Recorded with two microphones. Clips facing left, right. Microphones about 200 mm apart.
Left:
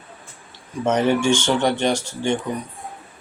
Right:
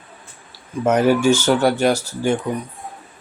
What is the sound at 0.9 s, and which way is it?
Speech, 5° right (ahead or behind).